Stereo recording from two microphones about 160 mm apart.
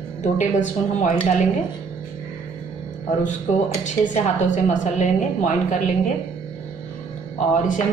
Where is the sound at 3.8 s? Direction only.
50° left (ahead or behind).